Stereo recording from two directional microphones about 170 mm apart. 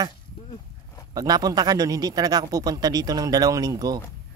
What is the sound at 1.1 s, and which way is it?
A man's voice, 20° right (ahead or behind).